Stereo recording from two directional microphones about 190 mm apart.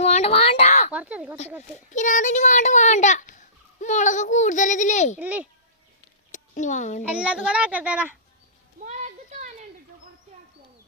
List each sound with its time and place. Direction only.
0.0 s a sound: 35° left (ahead or behind)
0.9 s speech: 5° right (ahead or behind)
1.9 s speech: 40° left (ahead or behind)
5.2 s speech: 5° right (ahead or behind)
6.3 s speech: 40° left (ahead or behind)
7.2 s speech: 5° right (ahead or behind)
8.8 s a sound: 40° right (ahead or behind)